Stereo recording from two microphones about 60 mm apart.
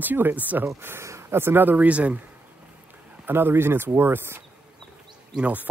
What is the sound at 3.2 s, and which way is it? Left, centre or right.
Speech, right.